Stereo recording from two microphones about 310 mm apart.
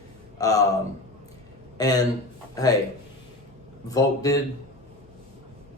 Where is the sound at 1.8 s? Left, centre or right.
Centre.